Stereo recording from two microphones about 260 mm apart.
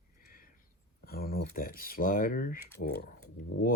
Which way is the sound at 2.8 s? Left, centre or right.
Left.